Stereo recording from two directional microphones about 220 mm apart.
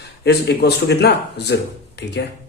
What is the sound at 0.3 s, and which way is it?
Speech, 50° left (ahead or behind).